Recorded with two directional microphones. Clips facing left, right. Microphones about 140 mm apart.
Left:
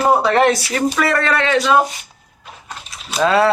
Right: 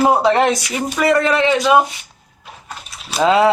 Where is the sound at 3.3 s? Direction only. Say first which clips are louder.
Right 2 dB; 20° right (ahead or behind).